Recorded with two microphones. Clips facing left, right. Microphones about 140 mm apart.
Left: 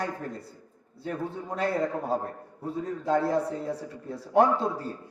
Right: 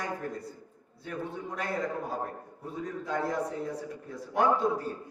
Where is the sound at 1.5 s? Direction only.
30° left (ahead or behind).